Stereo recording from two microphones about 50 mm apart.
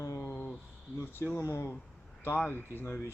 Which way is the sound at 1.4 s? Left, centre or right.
Left.